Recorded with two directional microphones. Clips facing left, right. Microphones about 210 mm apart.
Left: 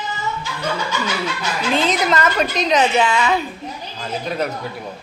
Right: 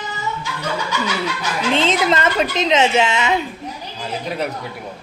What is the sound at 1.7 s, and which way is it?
A woman's voice, 25° right (ahead or behind).